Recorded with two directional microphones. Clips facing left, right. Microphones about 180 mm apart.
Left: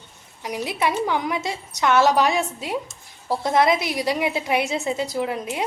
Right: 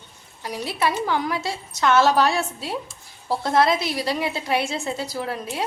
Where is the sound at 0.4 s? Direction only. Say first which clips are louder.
Left 1 dB; 20° left (ahead or behind).